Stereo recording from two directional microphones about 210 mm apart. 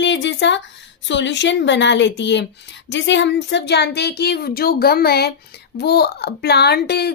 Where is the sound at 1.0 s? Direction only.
60° left (ahead or behind).